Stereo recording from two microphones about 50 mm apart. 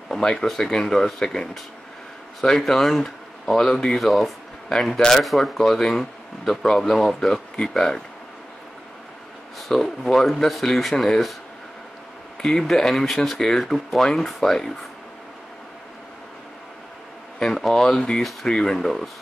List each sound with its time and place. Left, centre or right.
0.1 s speech: centre
9.6 s speech: centre
12.4 s speech: centre
17.4 s speech: centre